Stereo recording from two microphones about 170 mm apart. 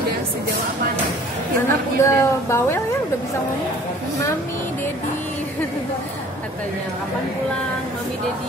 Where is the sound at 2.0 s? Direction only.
15° left (ahead or behind).